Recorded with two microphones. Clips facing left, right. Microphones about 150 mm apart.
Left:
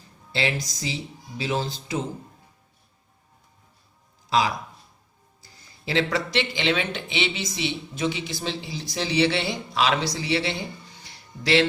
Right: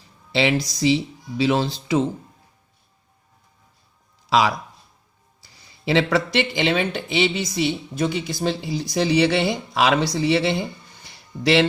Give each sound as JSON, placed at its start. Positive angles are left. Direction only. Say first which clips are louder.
{"t": 0.3, "sound": "speech", "louder": "right 7 dB", "side_deg": -75}
{"t": 4.3, "sound": "speech", "louder": "right 4 dB", "side_deg": -75}